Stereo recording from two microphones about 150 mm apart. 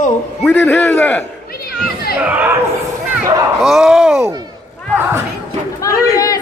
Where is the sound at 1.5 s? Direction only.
90° left.